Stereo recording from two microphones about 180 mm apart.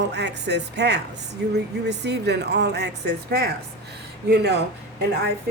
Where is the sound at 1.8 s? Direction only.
70° right (ahead or behind).